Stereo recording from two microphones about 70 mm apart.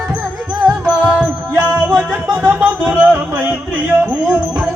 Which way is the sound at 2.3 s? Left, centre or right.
Right.